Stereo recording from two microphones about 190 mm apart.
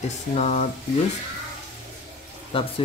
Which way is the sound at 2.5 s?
30° left (ahead or behind).